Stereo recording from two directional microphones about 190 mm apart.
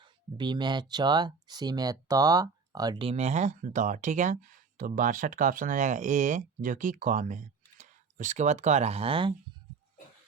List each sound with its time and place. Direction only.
0.0 s speech: 25° right (ahead or behind)